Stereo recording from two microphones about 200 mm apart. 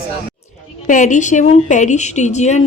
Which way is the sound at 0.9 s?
40° left (ahead or behind).